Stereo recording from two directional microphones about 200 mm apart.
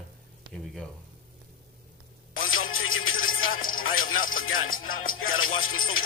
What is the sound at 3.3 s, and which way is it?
Music, 45° left (ahead or behind).